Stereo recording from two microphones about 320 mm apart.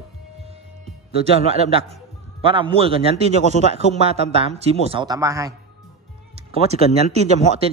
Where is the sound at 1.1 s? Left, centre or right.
Centre.